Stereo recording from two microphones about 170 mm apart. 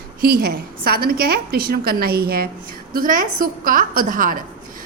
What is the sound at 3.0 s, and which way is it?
A woman's voice, 55° right (ahead or behind).